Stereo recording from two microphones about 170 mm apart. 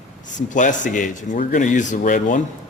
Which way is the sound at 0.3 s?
50° left (ahead or behind).